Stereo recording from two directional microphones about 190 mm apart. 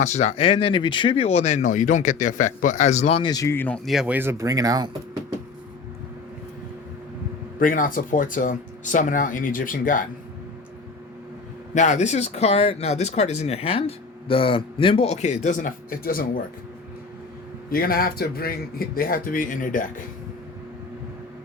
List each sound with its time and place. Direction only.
0.0 s speech: 40° left (ahead or behind); by 3.8 s 10° left (ahead or behind)
3.8 s speech: 5° right (ahead or behind)
7.6 s speech: 45° left (ahead or behind)
11.7 s speech: 40° left (ahead or behind)
17.7 s speech: 50° left (ahead or behind)